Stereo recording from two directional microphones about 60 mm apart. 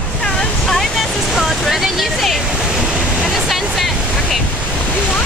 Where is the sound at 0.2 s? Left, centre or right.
Centre.